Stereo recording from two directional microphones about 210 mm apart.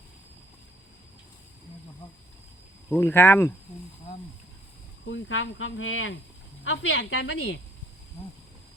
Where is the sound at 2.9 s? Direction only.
10° left (ahead or behind).